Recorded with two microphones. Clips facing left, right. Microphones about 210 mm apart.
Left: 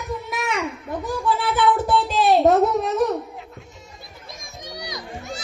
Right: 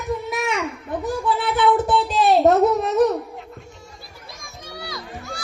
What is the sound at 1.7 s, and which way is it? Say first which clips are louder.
Music: right 1 dB; centre (ahead or behind).